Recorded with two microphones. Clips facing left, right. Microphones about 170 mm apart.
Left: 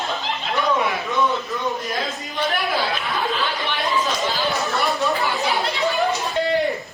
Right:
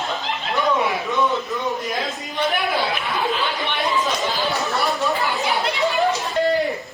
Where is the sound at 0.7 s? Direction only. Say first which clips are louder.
Right 1 dB; 20° right (ahead or behind).